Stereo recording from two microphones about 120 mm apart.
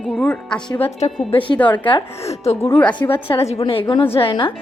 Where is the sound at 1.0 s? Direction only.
65° left (ahead or behind).